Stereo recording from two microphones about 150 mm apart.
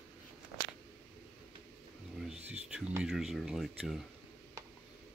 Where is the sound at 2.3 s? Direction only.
45° right (ahead or behind).